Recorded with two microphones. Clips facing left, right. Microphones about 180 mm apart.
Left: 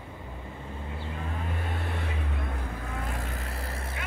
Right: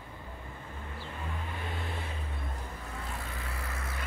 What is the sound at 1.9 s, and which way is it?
Vehicle, 65° left (ahead or behind).